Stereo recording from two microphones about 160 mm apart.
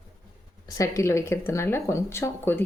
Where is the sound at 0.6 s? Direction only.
20° left (ahead or behind).